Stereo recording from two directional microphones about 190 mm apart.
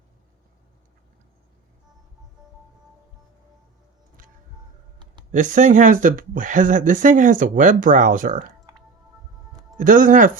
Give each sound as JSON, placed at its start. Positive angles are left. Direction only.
{"t": 5.3, "sound": "speech", "side_deg": -40}
{"t": 9.7, "sound": "speech", "side_deg": -45}